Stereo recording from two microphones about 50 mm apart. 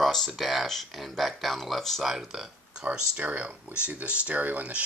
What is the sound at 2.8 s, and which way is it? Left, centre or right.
Speech, right.